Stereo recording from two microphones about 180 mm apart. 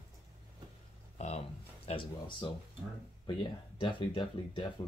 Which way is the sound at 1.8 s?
25° left (ahead or behind).